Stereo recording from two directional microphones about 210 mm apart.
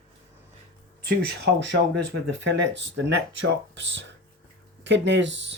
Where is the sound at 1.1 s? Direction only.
50° right (ahead or behind).